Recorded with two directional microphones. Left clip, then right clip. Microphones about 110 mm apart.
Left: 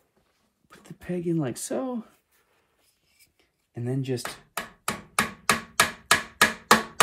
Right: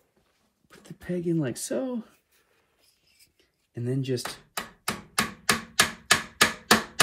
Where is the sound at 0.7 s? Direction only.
25° left (ahead or behind).